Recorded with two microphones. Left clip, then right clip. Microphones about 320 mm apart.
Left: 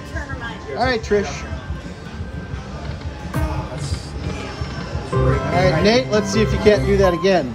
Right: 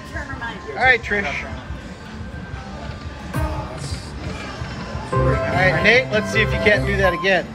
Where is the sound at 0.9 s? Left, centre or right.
Centre.